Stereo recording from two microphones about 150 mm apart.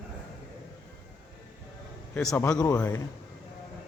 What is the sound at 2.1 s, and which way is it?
Speech, 15° left (ahead or behind).